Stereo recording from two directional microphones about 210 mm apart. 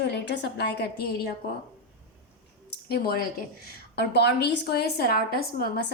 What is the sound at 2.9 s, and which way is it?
A woman's voice, 45° left (ahead or behind).